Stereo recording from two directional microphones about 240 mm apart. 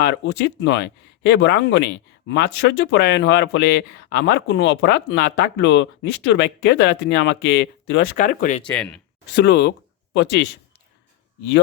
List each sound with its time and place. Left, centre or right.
0.0 s speech: left
8.7 s speech: centre
9.3 s speech: left